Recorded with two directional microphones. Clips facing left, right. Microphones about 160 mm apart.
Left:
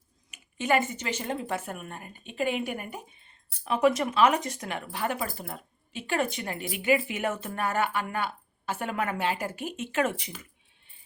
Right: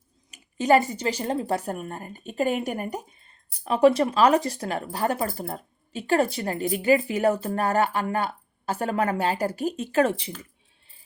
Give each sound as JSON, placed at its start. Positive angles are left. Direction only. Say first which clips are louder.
{"t": 0.3, "sound": "speech", "louder": "right 7 dB", "side_deg": -40}